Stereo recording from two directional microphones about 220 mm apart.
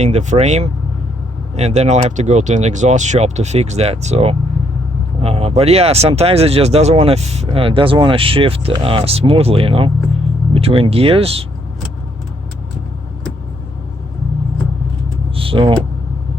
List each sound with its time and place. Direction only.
0.0 s speech: 30° right (ahead or behind)
15.4 s speech: 25° right (ahead or behind)